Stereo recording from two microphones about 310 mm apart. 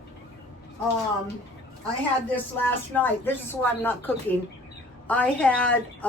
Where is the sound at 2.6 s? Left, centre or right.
Centre.